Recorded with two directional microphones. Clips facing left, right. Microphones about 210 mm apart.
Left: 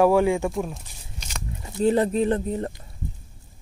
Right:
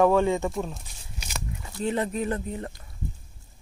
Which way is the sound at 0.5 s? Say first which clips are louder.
Left 3 dB; centre (ahead or behind).